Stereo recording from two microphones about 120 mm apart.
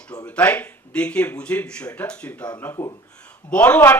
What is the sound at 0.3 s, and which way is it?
Speech, 10° left (ahead or behind).